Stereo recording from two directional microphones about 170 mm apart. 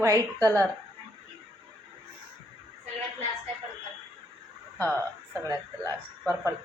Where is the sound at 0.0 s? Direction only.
20° right (ahead or behind).